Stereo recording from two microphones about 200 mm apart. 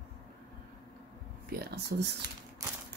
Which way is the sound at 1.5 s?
55° right (ahead or behind).